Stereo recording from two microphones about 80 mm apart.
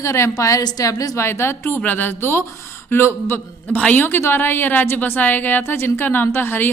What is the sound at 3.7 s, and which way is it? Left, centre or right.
A woman's voice, centre.